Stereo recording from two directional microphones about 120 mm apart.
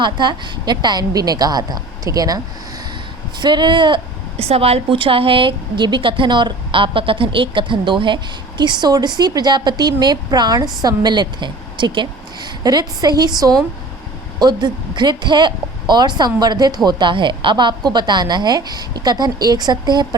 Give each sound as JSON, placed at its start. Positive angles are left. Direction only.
{"t": 0.0, "sound": "a woman's voice", "side_deg": -40}
{"t": 3.4, "sound": "a woman's voice", "side_deg": -40}
{"t": 4.4, "sound": "a woman's voice", "side_deg": -55}